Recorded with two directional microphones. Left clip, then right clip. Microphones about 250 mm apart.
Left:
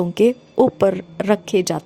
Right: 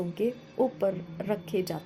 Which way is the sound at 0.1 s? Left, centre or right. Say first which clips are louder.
Left 14 dB; left.